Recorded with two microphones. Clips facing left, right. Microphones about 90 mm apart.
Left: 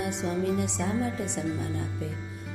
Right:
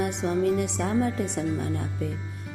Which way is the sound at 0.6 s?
55° right (ahead or behind).